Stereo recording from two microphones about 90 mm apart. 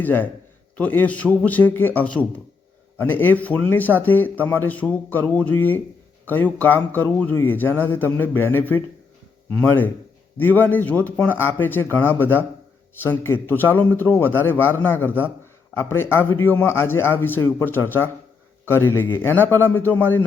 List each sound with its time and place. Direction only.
0.0 s a man's voice: 20° left (ahead or behind)